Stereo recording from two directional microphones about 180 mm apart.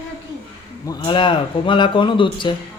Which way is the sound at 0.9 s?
25° left (ahead or behind).